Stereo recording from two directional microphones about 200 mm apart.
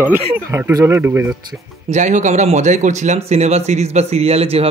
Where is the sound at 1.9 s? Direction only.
35° right (ahead or behind).